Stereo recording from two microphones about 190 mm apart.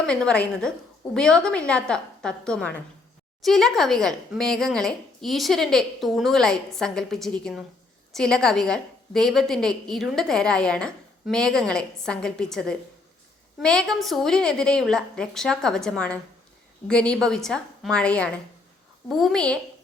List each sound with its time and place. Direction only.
0.0 s a woman's voice: 5° left (ahead or behind)